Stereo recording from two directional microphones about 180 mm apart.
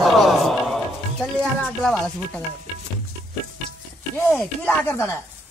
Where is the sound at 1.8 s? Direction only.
5° left (ahead or behind).